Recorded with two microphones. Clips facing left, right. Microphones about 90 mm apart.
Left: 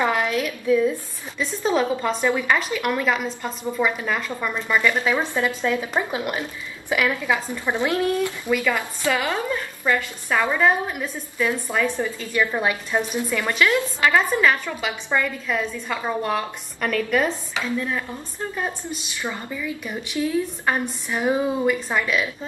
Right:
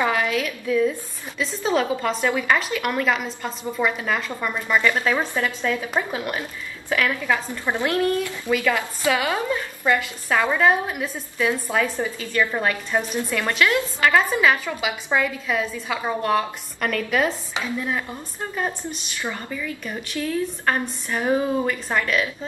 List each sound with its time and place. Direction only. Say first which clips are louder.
0.0 s a sound: even; 35° left (ahead or behind)
1.7 s a woman's voice: even; 5° left (ahead or behind)
5.3 s a woman's voice: left 1 dB; 20° left (ahead or behind)
8.5 s a woman's voice: right 2 dB; 5° left (ahead or behind)
9.0 s a woman's voice: right 1 dB; 10° right (ahead or behind)
12.3 s a woman's voice: even; 10° left (ahead or behind)
17.6 s speech: left 1 dB; 10° right (ahead or behind)
18.5 s a woman's voice: right 2 dB; centre (ahead or behind)
19.3 s a woman's voice: left 1 dB; 10° left (ahead or behind)